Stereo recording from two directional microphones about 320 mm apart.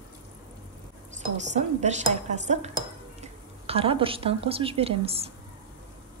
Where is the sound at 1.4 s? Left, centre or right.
Right.